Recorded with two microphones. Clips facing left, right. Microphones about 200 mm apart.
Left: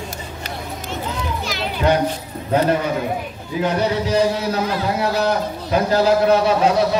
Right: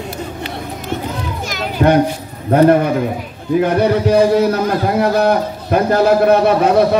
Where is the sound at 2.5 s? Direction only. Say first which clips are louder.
Right 7 dB; 55° right (ahead or behind).